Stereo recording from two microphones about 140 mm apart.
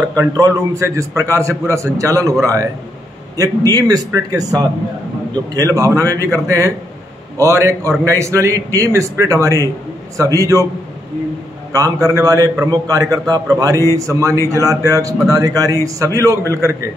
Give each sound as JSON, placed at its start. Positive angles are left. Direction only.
{"t": 0.1, "sound": "a man's voice", "side_deg": -25}
{"t": 11.7, "sound": "a man's voice", "side_deg": -25}